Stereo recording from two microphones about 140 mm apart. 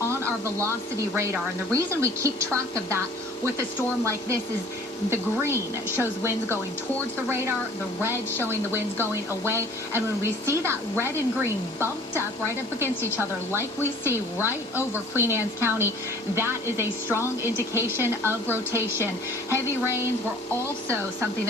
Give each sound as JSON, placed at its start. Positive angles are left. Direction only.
{"t": 0.1, "sound": "a sound", "side_deg": -20}
{"t": 1.1, "sound": "a woman's voice", "side_deg": -20}
{"t": 13.1, "sound": "a woman's voice", "side_deg": -15}